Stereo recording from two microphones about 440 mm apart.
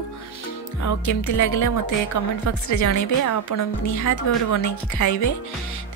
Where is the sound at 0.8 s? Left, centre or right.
Left.